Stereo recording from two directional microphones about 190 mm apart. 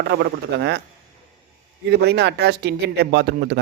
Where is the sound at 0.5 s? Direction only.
65° right (ahead or behind).